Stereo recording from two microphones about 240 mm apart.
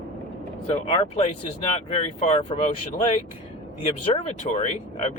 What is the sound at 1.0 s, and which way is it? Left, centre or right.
Speech, left.